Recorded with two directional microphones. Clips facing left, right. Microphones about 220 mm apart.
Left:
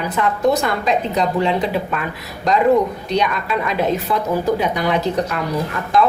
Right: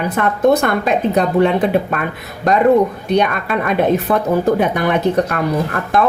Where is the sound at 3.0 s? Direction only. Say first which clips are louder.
Right 4 dB; 55° right (ahead or behind).